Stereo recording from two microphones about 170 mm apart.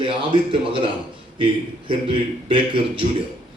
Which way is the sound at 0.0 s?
30° right (ahead or behind).